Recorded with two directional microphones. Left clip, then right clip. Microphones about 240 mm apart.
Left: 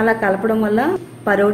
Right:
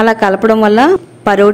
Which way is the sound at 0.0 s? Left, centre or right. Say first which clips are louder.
Right 6 dB; right.